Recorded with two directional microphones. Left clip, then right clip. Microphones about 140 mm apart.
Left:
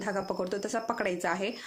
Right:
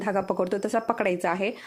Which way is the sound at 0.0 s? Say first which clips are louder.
Right 6 dB; 45° right (ahead or behind).